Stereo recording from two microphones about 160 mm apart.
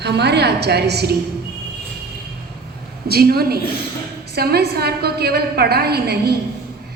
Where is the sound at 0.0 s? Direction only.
90° right.